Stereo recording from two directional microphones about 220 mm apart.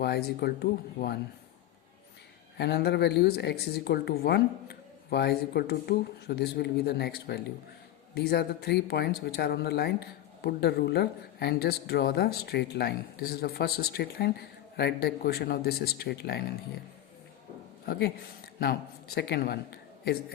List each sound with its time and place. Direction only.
0.0 s speech: 50° left (ahead or behind)
2.6 s speech: 45° left (ahead or behind)
18.6 s a man's voice: 45° left (ahead or behind)